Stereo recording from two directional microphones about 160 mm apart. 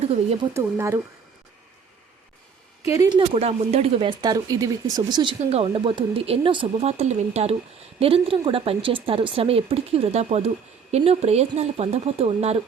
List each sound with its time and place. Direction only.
0.5 s speech: 15° right (ahead or behind)
2.9 s speech: 20° right (ahead or behind)
3.2 s a woman's voice: 40° right (ahead or behind)
4.2 s speech: 25° right (ahead or behind)
5.5 s a woman's voice: 35° right (ahead or behind)